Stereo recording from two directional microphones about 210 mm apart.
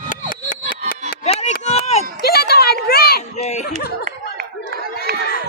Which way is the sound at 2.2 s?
50° left (ahead or behind).